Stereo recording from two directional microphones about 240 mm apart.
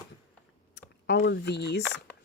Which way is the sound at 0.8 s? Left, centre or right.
Left.